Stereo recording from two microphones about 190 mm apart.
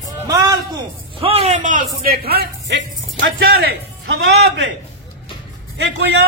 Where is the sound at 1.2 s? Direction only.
30° right (ahead or behind); by 3.5 s 60° right (ahead or behind).